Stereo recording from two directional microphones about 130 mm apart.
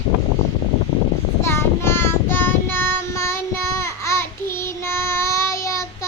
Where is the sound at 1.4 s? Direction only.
20° left (ahead or behind).